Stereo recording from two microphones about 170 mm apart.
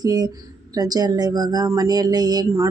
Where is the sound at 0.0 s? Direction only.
20° right (ahead or behind).